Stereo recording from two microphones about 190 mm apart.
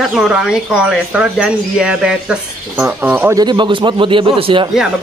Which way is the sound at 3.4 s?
25° right (ahead or behind).